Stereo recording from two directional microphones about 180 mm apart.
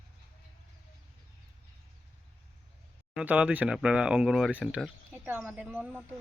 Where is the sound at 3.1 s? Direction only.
5° right (ahead or behind).